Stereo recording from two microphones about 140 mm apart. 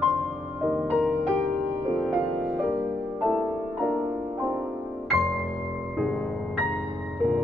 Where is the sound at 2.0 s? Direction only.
5° right (ahead or behind).